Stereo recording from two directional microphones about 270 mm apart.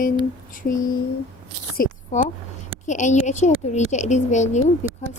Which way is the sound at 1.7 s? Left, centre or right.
Left.